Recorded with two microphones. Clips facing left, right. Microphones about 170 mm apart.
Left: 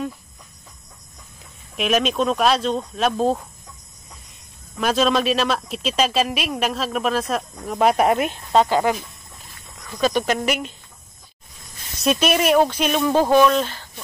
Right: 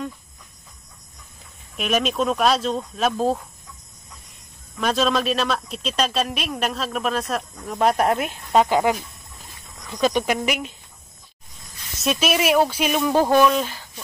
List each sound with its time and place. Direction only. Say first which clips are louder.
1.8 s a man's voice: left 2 dB; centre (ahead or behind)
4.7 s a man's voice: left 2 dB; centre (ahead or behind)
8.5 s speech: even; 15° right (ahead or behind)
12.0 s a man's voice: left 2 dB; centre (ahead or behind)